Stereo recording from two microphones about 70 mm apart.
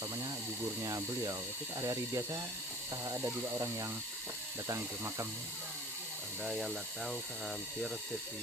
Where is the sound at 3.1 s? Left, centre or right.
Right.